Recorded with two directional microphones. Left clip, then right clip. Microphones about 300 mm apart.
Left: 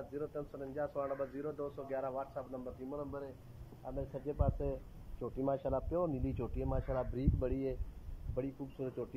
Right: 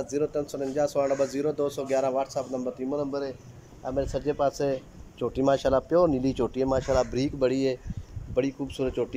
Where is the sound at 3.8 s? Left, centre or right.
Right.